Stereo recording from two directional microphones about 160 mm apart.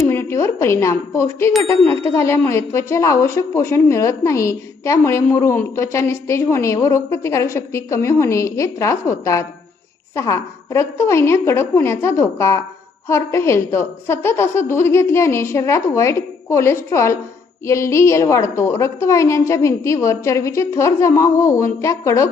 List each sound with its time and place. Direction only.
0.0 s a woman's voice: 15° left (ahead or behind)